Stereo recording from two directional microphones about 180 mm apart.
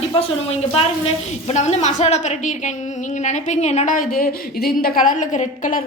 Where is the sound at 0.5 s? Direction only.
35° left (ahead or behind).